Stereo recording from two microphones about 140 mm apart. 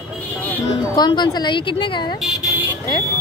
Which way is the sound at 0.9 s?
30° left (ahead or behind).